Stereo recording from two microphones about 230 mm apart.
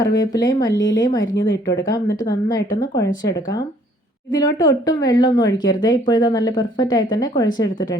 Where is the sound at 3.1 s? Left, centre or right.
Left.